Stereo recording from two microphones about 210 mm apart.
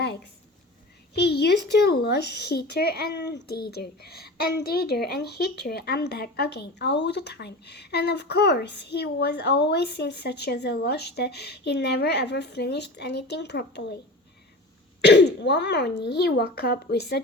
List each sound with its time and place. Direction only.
0.0 s a sound: 55° left (ahead or behind)
1.1 s speech: 50° left (ahead or behind)
15.0 s speech: 55° left (ahead or behind)